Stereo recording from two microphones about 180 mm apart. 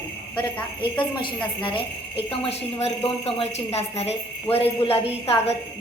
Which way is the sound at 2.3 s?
35° left (ahead or behind).